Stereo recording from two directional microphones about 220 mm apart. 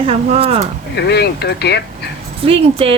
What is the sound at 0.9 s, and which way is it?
Speech, 50° left (ahead or behind).